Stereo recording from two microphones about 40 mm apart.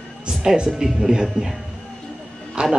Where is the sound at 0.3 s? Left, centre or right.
Centre.